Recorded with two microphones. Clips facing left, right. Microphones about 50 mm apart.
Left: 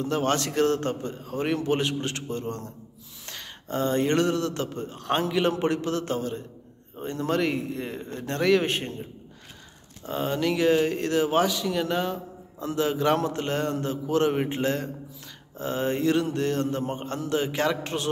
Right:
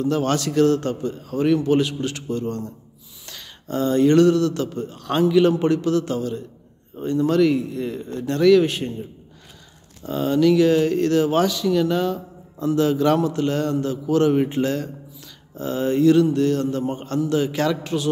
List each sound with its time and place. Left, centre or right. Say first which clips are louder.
0.0 s a man's voice: right 4 dB; left
10.0 s speech: right 8 dB; left
13.2 s speech: right 5 dB; left